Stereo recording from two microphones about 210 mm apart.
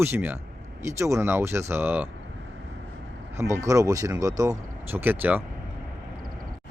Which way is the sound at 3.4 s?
15° right (ahead or behind).